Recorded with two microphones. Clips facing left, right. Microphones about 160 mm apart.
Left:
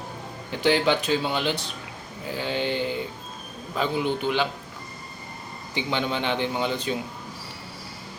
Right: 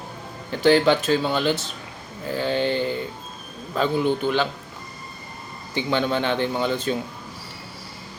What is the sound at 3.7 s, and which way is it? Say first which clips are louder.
Speech: right 4 dB; 15° left (ahead or behind).